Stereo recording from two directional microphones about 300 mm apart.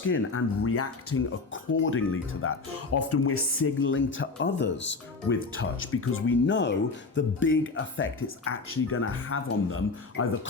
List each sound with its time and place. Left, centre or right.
0.1 s speech: left